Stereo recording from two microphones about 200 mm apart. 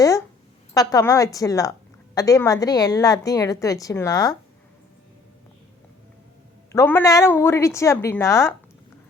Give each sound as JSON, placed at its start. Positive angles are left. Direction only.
{"t": 0.7, "sound": "a woman's voice", "side_deg": 15}
{"t": 6.7, "sound": "a woman's voice", "side_deg": 15}